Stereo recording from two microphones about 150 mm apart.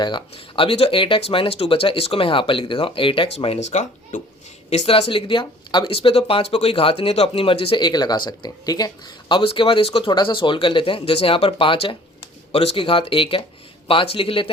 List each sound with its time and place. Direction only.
0.0 s speech: 35° left (ahead or behind); by 4.2 s 50° left (ahead or behind)
4.7 s speech: 40° left (ahead or behind)